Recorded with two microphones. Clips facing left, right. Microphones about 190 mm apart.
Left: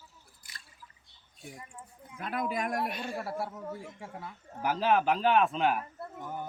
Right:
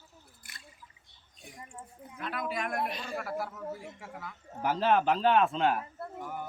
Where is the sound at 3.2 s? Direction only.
30° left (ahead or behind).